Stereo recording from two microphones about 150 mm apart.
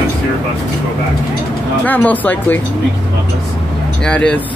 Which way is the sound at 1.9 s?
10° left (ahead or behind).